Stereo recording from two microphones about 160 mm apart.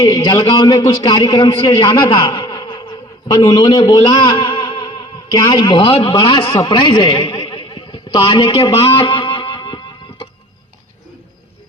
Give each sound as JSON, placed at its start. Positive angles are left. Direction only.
{"t": 0.0, "sound": "a man's voice", "side_deg": 25}